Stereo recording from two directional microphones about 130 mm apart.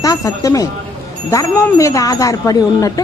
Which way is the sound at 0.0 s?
25° left (ahead or behind).